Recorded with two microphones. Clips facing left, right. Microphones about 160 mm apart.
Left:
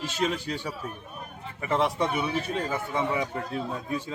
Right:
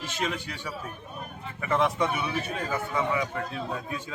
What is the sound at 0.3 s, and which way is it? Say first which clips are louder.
A man's voice: left 3 dB; 35° left (ahead or behind).